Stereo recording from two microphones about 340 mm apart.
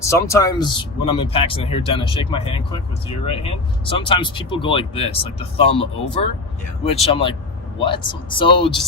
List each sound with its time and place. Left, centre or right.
0.0 s speech: centre